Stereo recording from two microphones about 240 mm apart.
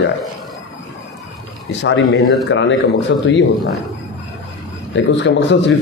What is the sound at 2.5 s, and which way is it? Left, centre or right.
Speech, left.